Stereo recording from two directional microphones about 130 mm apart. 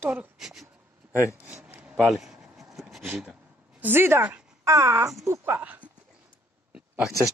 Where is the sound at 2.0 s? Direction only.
Centre (ahead or behind).